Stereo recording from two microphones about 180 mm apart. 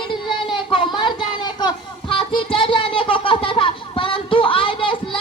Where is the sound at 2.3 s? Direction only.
30° left (ahead or behind).